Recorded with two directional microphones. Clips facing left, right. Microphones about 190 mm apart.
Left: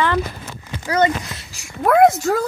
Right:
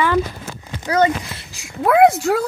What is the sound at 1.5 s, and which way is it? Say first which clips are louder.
Speech: even; 15° right (ahead or behind).